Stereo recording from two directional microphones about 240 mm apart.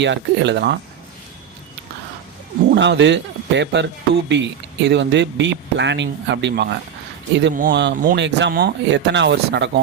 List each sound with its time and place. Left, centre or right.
0.0 s a man's voice: right
2.7 s a man's voice: right